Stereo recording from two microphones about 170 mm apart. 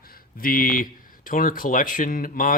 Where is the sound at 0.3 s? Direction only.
55° left (ahead or behind).